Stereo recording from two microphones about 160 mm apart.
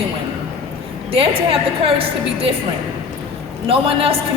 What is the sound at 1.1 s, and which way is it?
A man's voice, 35° right (ahead or behind).